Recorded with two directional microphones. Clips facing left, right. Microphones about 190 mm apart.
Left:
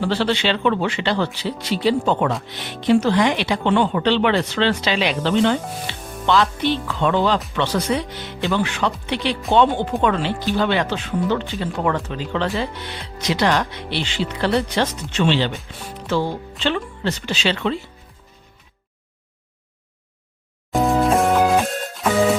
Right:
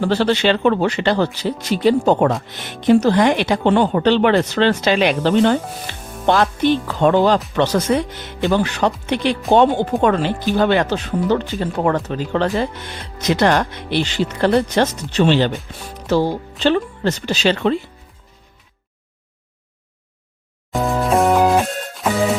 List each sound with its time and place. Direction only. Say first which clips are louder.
0.0 s speech: right 4 dB; 45° right (ahead or behind)
20.7 s music: even; centre (ahead or behind)